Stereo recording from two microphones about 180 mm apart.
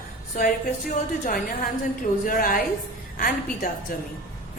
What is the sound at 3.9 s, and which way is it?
Speech, 50° left (ahead or behind).